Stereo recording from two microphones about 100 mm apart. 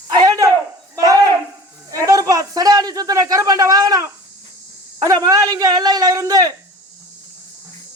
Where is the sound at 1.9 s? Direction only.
35° right (ahead or behind).